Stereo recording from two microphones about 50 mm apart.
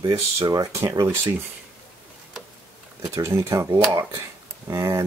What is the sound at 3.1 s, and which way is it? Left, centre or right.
Speech, right.